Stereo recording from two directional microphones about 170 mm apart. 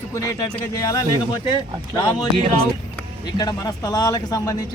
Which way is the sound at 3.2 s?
25° left (ahead or behind).